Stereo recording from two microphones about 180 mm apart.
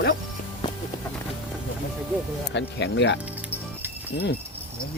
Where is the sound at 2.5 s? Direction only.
75° left (ahead or behind).